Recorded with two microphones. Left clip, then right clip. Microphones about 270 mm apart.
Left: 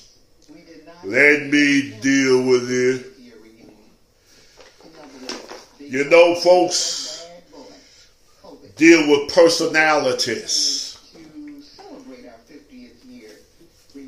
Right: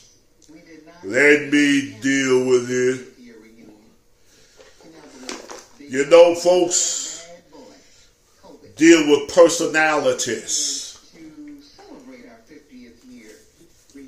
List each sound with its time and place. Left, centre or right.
1.0 s mantra: centre
5.9 s speech: centre
8.7 s a man's voice: centre
9.2 s mantra: centre